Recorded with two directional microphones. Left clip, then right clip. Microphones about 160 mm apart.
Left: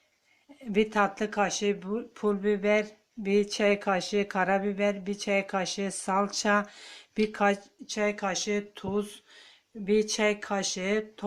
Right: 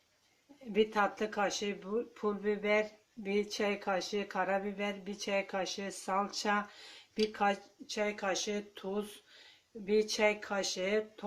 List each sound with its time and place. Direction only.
0.7 s speech: 60° left (ahead or behind)